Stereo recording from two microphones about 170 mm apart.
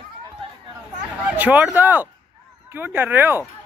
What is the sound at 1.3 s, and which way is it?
Speech, 10° right (ahead or behind).